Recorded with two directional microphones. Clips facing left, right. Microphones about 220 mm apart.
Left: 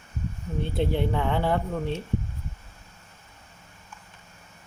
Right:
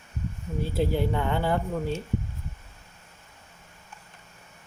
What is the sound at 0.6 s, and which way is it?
Speech, 5° right (ahead or behind).